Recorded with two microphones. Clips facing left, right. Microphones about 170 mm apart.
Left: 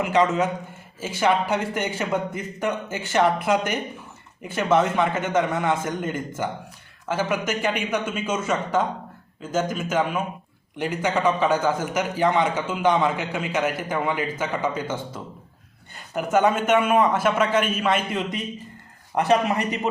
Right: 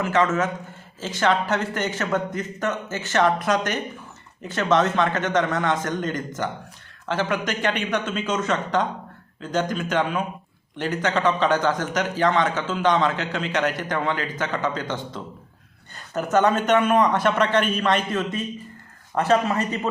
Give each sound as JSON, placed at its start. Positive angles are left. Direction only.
{"t": 0.0, "sound": "a man's voice", "side_deg": 15}